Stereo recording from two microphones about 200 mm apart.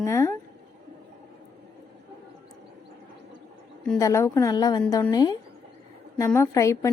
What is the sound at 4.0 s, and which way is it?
A woman's voice, 15° left (ahead or behind).